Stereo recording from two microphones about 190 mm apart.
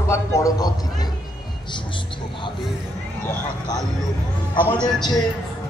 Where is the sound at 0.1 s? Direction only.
20° left (ahead or behind).